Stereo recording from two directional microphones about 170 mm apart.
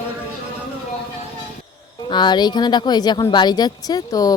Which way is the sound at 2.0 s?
25° left (ahead or behind).